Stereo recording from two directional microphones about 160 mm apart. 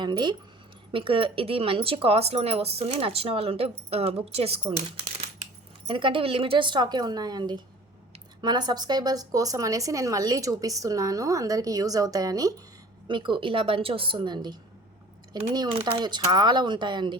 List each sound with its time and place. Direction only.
0.0 s speech: 25° right (ahead or behind)
5.9 s speech: 30° right (ahead or behind)
15.5 s speech: 25° right (ahead or behind)